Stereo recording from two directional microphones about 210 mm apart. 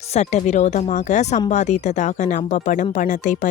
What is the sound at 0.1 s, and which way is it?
Speech, 30° left (ahead or behind).